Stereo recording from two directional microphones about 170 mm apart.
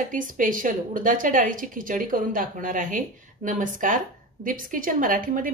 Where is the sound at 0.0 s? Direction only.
50° right (ahead or behind).